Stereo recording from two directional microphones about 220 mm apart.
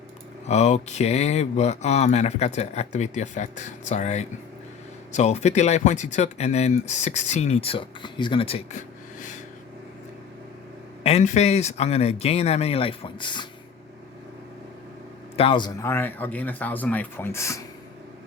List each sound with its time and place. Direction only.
0.4 s speech: 30° left (ahead or behind)
11.0 s speech: 30° left (ahead or behind)
15.4 s speech: 20° left (ahead or behind)